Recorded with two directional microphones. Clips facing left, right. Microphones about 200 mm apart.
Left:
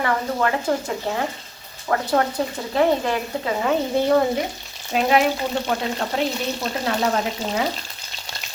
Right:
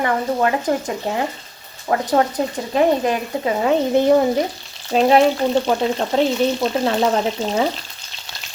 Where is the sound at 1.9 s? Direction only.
20° right (ahead or behind).